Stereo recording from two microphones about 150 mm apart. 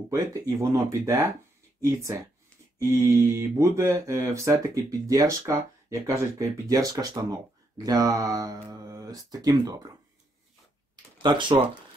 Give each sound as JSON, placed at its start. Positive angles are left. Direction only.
{"t": 0.1, "sound": "speech", "side_deg": -25}
{"t": 11.2, "sound": "speech", "side_deg": -35}